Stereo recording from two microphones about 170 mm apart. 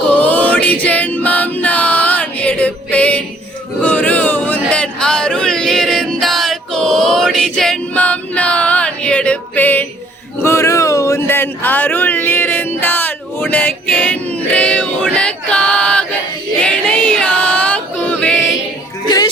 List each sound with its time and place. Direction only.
0.1 s a sound: 10° left (ahead or behind)
16.6 s music: 5° left (ahead or behind)
19.0 s music: 25° left (ahead or behind)